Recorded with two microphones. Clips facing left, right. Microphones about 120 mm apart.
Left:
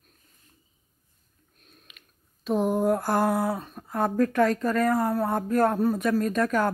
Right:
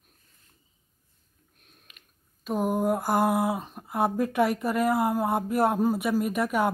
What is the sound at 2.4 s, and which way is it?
Speech, 5° right (ahead or behind).